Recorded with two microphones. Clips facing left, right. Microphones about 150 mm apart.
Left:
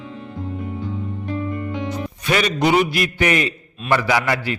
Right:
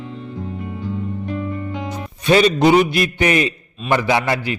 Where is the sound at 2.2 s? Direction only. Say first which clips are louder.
Right 6 dB; 25° right (ahead or behind).